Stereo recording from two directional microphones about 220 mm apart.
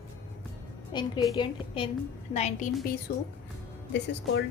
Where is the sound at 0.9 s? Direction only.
20° left (ahead or behind).